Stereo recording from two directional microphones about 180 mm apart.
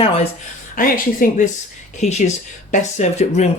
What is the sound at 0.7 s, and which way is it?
Speech, 50° left (ahead or behind).